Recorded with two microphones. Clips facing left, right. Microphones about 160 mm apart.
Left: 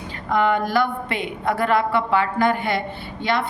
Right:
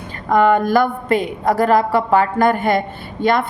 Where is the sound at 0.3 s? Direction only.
45° right (ahead or behind).